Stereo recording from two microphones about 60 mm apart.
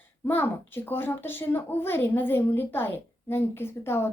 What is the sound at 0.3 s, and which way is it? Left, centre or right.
A child's voice, left.